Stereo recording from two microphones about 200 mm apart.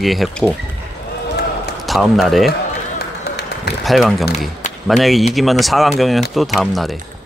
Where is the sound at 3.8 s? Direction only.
Centre (ahead or behind).